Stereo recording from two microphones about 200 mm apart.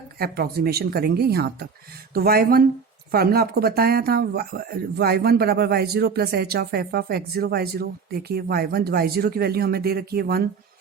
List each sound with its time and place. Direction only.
0.2 s speech: 50° right (ahead or behind)